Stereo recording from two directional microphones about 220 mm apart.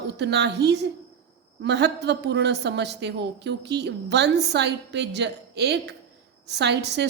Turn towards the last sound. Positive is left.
turn(degrees=-50)  # may be behind; listen again after turning